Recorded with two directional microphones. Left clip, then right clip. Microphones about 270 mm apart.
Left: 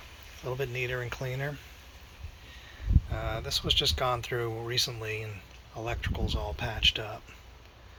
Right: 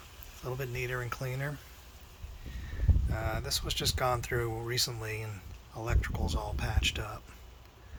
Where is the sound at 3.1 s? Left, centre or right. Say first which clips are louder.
Left 2 dB; centre.